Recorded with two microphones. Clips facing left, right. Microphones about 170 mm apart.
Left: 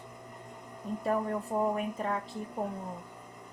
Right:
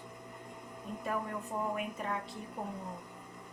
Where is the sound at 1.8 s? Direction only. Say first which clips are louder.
Left 4 dB; 35° left (ahead or behind).